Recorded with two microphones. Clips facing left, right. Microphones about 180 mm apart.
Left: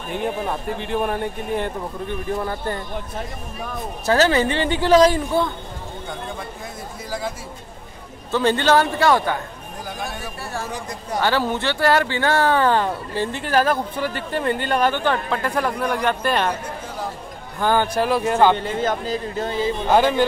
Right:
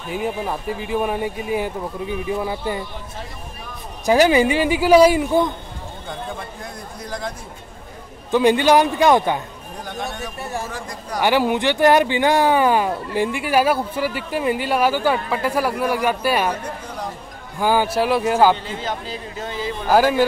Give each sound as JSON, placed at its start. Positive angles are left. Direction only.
{"t": 0.1, "sound": "a man's voice", "side_deg": -5}
{"t": 4.0, "sound": "speech", "side_deg": -15}
{"t": 7.1, "sound": "a man's voice", "side_deg": 5}
{"t": 8.3, "sound": "speech", "side_deg": -15}
{"t": 11.1, "sound": "speech", "side_deg": -15}
{"t": 17.6, "sound": "a man's voice", "side_deg": -10}
{"t": 18.6, "sound": "a man's voice", "side_deg": 50}
{"t": 19.9, "sound": "speech", "side_deg": -5}